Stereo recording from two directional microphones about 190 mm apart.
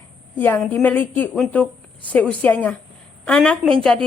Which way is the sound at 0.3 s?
10° left (ahead or behind).